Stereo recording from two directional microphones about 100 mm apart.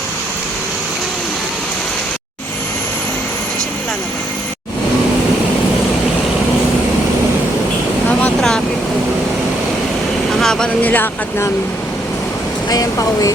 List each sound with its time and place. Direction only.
8.4 s vehicle: 5° left (ahead or behind)
10.4 s speech: 5° left (ahead or behind); by 11.5 s 25° left (ahead or behind)
12.7 s speech: 35° left (ahead or behind)